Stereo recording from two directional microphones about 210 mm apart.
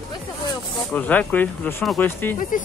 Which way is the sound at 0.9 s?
10° left (ahead or behind).